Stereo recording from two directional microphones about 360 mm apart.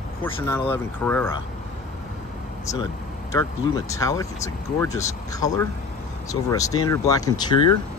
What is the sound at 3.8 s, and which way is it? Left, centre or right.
Speech, centre.